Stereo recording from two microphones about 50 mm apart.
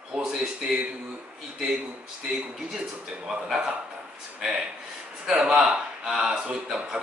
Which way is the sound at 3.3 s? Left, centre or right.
Centre.